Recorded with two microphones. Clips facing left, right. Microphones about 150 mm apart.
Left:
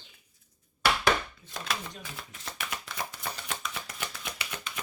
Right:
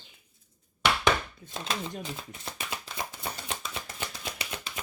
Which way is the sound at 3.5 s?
25° right (ahead or behind).